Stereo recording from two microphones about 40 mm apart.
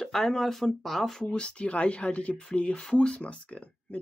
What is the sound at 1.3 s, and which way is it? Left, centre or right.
Speech, left.